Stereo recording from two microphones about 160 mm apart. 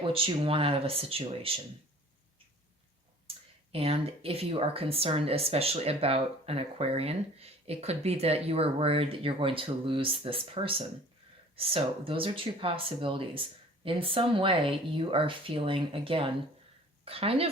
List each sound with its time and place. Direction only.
0.0 s speech: 35° right (ahead or behind)
3.2 s speech: 35° right (ahead or behind)